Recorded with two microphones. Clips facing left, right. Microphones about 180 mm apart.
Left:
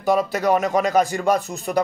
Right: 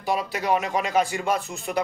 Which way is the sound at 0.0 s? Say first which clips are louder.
Left 7 dB; 45° left (ahead or behind).